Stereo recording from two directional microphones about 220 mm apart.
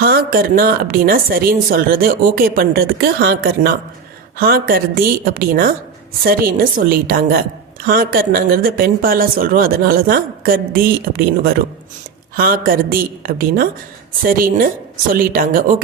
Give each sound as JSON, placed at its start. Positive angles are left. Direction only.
{"t": 0.0, "sound": "speech", "side_deg": -40}